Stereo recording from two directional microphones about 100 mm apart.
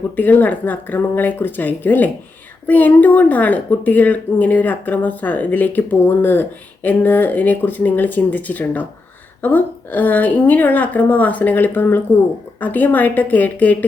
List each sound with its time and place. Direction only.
0.2 s speech: 20° left (ahead or behind)